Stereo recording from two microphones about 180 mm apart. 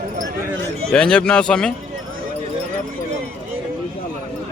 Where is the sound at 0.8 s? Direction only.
5° left (ahead or behind).